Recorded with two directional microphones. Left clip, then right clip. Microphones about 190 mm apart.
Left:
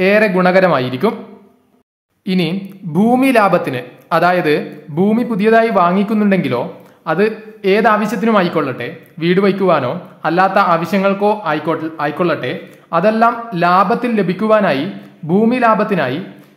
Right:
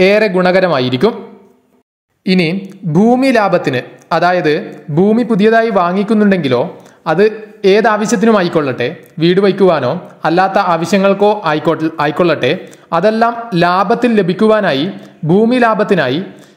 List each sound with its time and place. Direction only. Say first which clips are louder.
0.0 s speech: right 2 dB; 25° right (ahead or behind)
2.2 s speech: right 5 dB; 25° right (ahead or behind)